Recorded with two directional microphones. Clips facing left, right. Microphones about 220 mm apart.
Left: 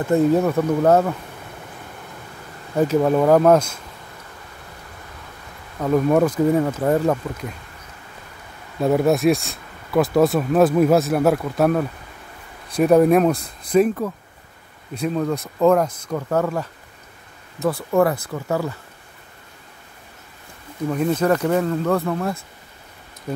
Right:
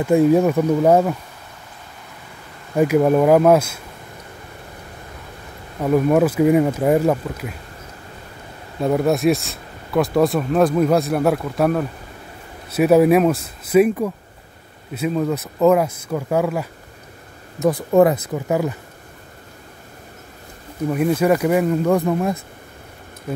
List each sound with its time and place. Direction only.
0.0 s speech: 10° right (ahead or behind)
2.7 s speech: 10° right (ahead or behind)
5.8 s speech: 5° right (ahead or behind)
8.8 s speech: centre (ahead or behind); by 18.8 s 15° right (ahead or behind)
20.9 s speech: 10° right (ahead or behind)